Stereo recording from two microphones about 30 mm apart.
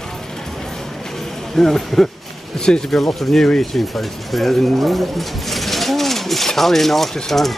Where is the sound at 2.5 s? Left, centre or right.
Left.